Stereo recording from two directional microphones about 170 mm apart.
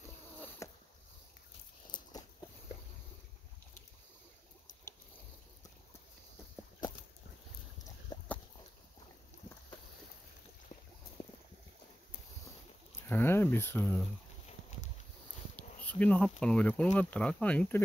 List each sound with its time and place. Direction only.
0.6 s rowboat: 20° left (ahead or behind)
1.9 s walk: 25° left (ahead or behind)
8.1 s a sound: 25° left (ahead or behind)
10.7 s boat: 50° left (ahead or behind)
11.2 s a sound: 15° left (ahead or behind)
13.0 s speech: 15° left (ahead or behind)
15.5 s speech: 10° left (ahead or behind)